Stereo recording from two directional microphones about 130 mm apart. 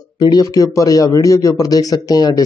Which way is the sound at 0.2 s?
30° left (ahead or behind).